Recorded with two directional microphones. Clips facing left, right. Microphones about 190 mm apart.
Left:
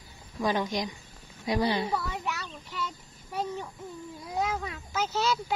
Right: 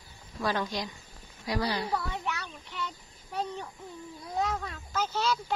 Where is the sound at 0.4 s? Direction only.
15° left (ahead or behind).